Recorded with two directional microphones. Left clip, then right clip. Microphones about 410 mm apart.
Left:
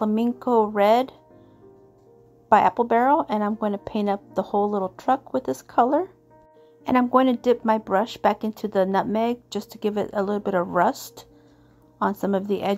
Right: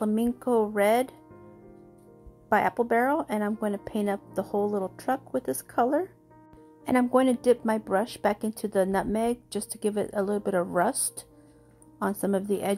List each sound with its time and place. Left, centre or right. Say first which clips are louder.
0.0 s speech: left 4 dB; centre
2.5 s speech: left 6 dB; centre